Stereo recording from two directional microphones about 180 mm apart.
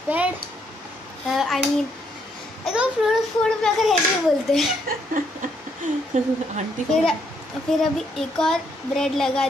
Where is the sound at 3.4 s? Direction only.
Centre (ahead or behind).